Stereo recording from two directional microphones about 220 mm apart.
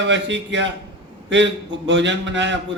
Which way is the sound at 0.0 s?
55° right (ahead or behind).